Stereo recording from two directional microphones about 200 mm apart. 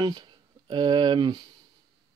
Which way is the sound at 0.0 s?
20° right (ahead or behind).